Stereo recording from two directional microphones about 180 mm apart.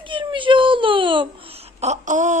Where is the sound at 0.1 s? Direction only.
25° right (ahead or behind).